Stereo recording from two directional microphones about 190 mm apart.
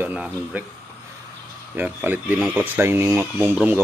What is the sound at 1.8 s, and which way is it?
Speech, 10° right (ahead or behind).